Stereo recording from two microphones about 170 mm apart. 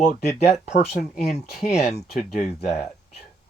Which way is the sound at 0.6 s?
40° left (ahead or behind).